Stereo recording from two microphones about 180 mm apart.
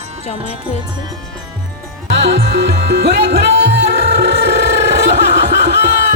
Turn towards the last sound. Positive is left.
turn(degrees=-70)  # may be behind; listen again after turning